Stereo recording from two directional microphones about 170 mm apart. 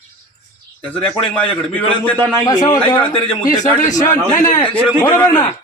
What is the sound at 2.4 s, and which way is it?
Speech, 20° left (ahead or behind).